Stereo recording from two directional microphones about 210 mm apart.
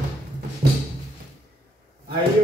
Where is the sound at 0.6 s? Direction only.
45° right (ahead or behind).